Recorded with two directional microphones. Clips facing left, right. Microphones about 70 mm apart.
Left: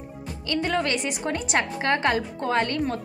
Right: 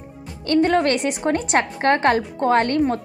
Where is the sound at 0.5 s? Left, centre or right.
Right.